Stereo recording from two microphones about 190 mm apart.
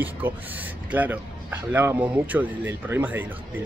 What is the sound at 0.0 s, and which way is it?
Speech, 10° right (ahead or behind).